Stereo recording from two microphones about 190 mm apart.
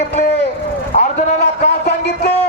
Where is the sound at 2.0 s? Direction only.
65° left (ahead or behind).